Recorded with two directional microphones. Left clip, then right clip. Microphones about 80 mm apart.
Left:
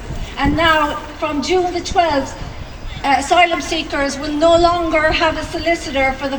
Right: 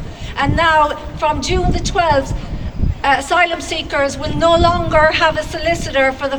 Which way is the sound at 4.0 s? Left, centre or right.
Right.